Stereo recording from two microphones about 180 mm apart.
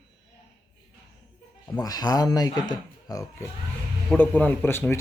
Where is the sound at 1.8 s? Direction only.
20° left (ahead or behind).